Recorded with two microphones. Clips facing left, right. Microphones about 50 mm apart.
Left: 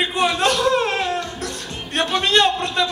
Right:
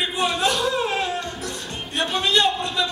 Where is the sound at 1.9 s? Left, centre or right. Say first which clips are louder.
Left 3 dB; left.